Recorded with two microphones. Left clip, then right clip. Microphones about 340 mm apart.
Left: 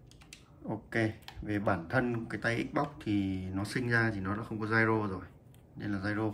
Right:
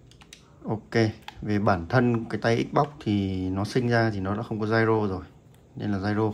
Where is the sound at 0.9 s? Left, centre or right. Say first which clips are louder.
Right 8 dB; centre.